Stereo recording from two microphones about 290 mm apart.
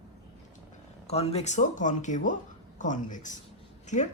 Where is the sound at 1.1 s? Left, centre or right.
Left.